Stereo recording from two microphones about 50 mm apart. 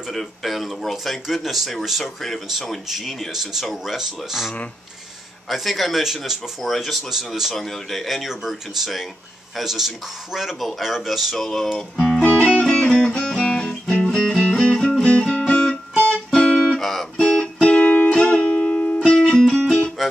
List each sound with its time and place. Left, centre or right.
0.1 s speech: centre
5.5 s speech: centre
6.6 s speech: centre
7.5 s speech: centre
11.4 s music: centre
12.2 s music: left
12.4 s music: centre
16.3 s guitar: centre
17.2 s music: centre
19.0 s music: centre